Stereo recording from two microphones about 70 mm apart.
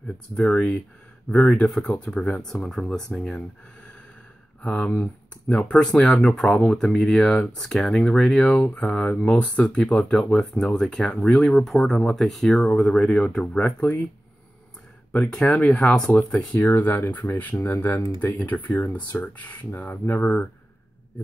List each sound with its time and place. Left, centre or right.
0.3 s speech: centre
2.4 s speech: centre
15.1 s speech: centre
16.1 s speech: centre